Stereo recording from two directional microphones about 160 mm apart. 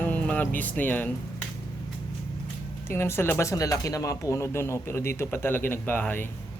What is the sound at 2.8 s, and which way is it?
Speech, 15° left (ahead or behind).